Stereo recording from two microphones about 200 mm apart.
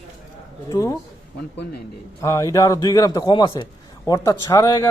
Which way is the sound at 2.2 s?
15° left (ahead or behind).